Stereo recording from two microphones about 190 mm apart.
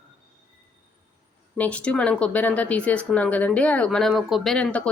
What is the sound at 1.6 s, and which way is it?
Speech, 5° left (ahead or behind).